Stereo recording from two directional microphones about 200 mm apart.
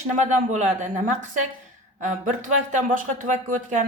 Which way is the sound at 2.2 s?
40° right (ahead or behind).